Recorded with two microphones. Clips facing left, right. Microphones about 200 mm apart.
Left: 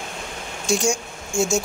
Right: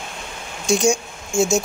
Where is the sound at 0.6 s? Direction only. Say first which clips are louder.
Right 4 dB; 20° right (ahead or behind).